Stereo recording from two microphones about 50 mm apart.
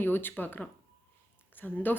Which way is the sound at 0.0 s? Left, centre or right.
Left.